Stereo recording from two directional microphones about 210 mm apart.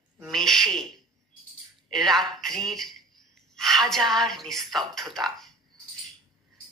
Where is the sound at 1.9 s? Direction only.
Centre (ahead or behind).